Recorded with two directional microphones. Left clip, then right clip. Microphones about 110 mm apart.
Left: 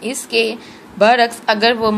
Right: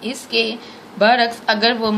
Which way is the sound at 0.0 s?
30° left (ahead or behind).